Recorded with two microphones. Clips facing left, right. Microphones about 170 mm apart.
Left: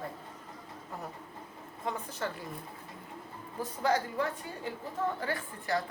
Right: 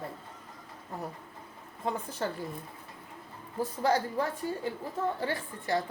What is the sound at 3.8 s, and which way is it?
A woman's voice, 30° right (ahead or behind).